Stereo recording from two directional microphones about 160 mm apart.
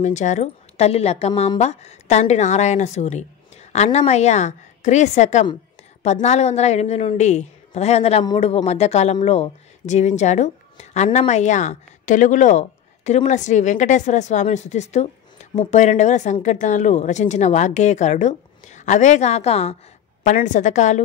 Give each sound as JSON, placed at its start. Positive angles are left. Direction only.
{"t": 0.0, "sound": "a woman's voice", "side_deg": 50}